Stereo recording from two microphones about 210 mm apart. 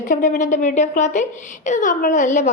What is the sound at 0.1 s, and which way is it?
A woman's voice, 35° left (ahead or behind).